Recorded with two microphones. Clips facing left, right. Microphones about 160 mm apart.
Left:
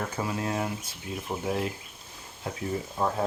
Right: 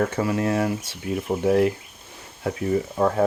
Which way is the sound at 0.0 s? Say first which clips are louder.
Right 8 dB; 70° right (ahead or behind).